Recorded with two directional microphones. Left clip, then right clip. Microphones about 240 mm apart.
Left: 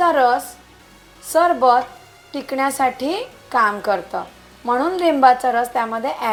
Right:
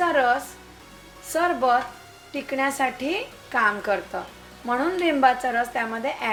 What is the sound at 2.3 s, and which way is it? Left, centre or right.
A woman's voice, centre.